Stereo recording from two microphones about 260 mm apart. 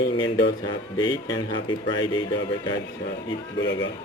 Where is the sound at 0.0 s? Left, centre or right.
Left.